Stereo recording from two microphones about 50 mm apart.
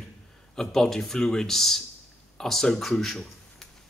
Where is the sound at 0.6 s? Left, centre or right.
Centre.